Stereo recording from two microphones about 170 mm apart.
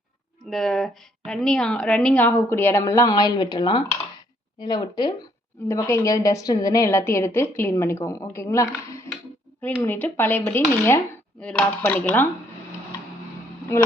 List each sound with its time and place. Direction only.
0.5 s speech: centre (ahead or behind)